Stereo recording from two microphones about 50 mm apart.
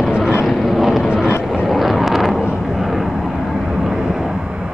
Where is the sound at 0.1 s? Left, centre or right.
Left.